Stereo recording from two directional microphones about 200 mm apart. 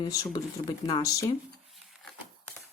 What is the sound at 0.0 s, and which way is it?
Speech, 15° left (ahead or behind).